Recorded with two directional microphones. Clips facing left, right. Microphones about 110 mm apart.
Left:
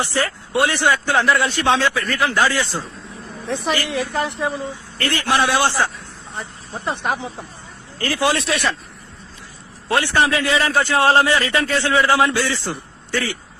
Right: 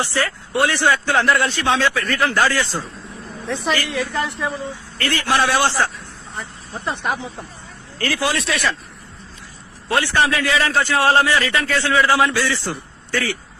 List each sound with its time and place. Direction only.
0.0 s a woman's voice: 15° left (ahead or behind)
1.2 s speech: centre (ahead or behind)
1.5 s a woman's voice: 20° left (ahead or behind)
9.9 s a man's voice: 20° left (ahead or behind)